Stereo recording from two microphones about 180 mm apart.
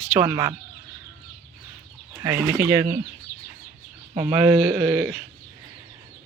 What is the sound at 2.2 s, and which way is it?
Speech, 15° right (ahead or behind).